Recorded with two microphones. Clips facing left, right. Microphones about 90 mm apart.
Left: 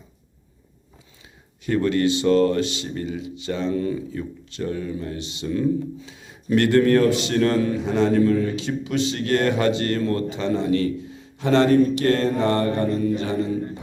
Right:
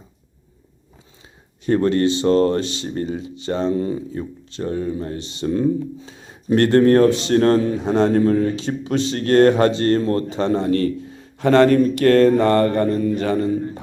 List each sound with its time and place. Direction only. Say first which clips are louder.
1.6 s speech: right 3 dB; 35° right (ahead or behind)